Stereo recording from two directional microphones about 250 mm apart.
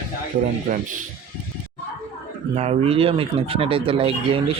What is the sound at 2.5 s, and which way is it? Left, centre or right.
Speech, right.